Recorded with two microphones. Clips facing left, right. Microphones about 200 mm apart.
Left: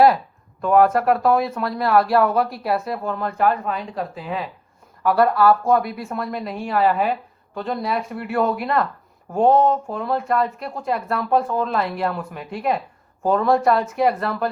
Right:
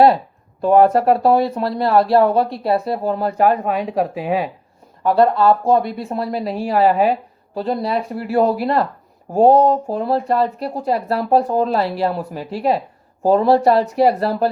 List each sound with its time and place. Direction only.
0.6 s speech: 35° right (ahead or behind)
3.7 s speech: 70° right (ahead or behind)
5.0 s speech: 25° right (ahead or behind)